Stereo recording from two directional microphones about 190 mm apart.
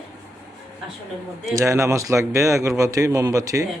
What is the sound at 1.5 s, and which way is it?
A man's voice, 15° right (ahead or behind).